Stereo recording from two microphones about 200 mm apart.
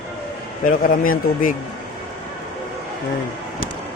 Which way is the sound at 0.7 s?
45° left (ahead or behind).